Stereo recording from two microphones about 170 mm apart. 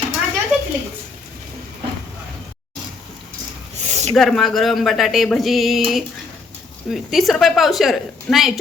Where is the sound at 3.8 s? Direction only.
45° right (ahead or behind).